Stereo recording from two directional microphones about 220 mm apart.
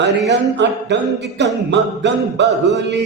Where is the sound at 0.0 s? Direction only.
50° right (ahead or behind).